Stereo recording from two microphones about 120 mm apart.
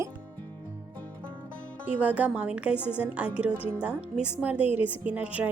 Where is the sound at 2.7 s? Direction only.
15° left (ahead or behind).